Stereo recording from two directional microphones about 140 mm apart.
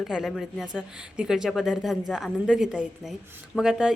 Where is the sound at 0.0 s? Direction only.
Centre (ahead or behind).